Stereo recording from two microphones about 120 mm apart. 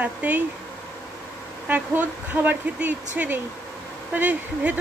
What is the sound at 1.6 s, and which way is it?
A woman's voice, 15° right (ahead or behind).